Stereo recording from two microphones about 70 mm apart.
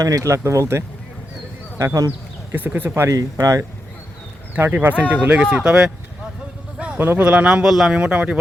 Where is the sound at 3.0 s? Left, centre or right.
Right.